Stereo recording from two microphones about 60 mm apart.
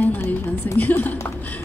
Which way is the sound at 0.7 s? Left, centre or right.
Left.